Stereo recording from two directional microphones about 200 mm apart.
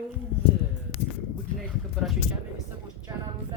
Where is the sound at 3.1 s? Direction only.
25° right (ahead or behind).